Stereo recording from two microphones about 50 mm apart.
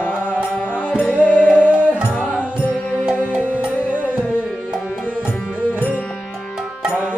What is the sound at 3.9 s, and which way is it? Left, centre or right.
Music, right.